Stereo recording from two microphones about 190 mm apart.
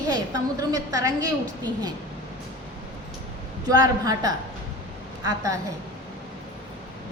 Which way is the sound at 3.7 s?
20° right (ahead or behind).